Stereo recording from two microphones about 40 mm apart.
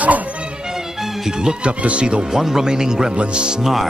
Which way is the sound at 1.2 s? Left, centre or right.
Centre.